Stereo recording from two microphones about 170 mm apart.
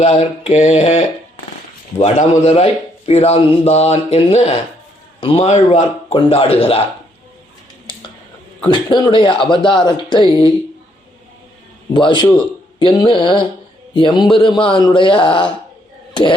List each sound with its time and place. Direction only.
0.0 s a man's voice: 35° left (ahead or behind)
8.6 s speech: 25° left (ahead or behind)
11.9 s speech: 25° left (ahead or behind)